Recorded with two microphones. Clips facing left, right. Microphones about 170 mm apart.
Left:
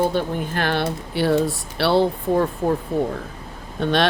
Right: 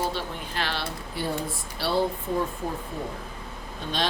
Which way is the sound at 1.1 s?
80° left.